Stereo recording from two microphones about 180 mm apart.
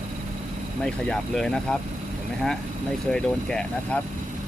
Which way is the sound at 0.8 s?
5° left (ahead or behind).